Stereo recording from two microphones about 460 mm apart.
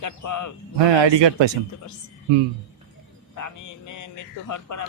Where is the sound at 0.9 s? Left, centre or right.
Right.